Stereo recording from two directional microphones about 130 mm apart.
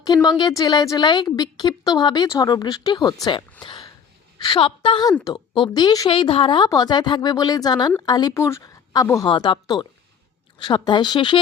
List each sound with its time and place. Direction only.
0.0 s a woman's voice: 30° left (ahead or behind)
3.6 s a sound: 35° left (ahead or behind)
4.4 s a woman's voice: 40° left (ahead or behind)
6.1 s a woman's voice: 40° left (ahead or behind)
6.7 s a woman's voice: 30° left (ahead or behind)
9.2 s a woman's voice: 35° left (ahead or behind)